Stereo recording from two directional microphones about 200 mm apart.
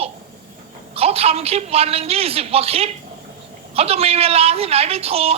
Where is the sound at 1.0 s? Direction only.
30° right (ahead or behind).